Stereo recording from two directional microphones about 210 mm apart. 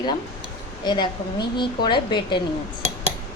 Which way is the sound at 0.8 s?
20° left (ahead or behind).